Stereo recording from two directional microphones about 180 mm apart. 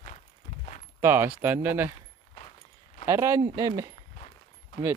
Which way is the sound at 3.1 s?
15° right (ahead or behind).